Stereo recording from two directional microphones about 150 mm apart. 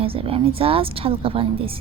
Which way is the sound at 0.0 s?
40° right (ahead or behind).